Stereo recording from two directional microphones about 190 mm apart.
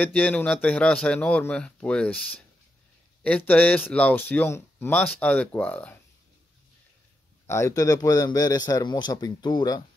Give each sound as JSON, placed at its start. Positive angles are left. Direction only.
{"t": 0.0, "sound": "a man's voice", "side_deg": 10}
{"t": 3.3, "sound": "a man's voice", "side_deg": 5}
{"t": 7.4, "sound": "a man's voice", "side_deg": 15}